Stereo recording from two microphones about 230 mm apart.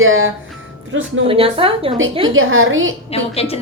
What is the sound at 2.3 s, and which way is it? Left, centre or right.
Speech, right.